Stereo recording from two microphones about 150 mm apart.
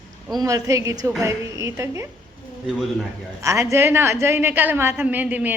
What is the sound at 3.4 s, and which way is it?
A woman's voice, 20° right (ahead or behind).